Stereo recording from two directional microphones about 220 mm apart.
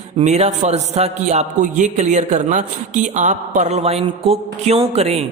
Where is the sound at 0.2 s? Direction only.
30° right (ahead or behind).